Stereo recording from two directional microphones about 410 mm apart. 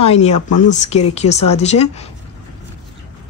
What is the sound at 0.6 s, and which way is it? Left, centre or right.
Speech, centre.